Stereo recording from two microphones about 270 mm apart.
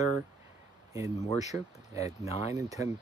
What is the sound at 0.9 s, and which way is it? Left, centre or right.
Speech, centre.